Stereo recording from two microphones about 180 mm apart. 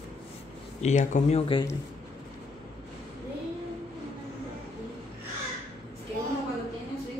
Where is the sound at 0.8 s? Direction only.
40° left (ahead or behind).